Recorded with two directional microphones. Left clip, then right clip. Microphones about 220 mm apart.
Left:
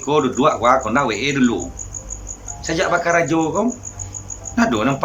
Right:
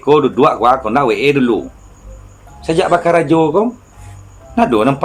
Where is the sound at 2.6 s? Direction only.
15° right (ahead or behind).